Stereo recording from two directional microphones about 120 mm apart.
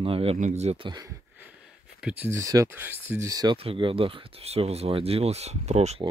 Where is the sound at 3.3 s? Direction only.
35° right (ahead or behind).